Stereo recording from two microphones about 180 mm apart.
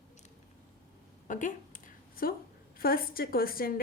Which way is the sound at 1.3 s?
45° left (ahead or behind).